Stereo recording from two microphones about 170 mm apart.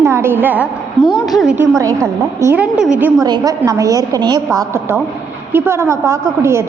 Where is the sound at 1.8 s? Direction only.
20° right (ahead or behind); by 3.2 s 5° right (ahead or behind).